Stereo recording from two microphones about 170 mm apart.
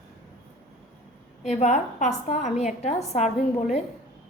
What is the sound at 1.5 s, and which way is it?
A woman's voice, 45° left (ahead or behind).